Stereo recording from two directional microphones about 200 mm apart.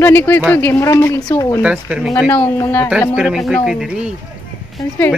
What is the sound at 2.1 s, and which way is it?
Speech, 10° left (ahead or behind).